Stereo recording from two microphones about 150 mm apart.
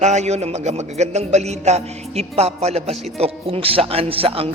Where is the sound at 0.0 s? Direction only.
50° right (ahead or behind).